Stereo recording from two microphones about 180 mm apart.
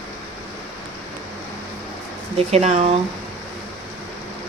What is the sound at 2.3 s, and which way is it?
Speech, 35° right (ahead or behind).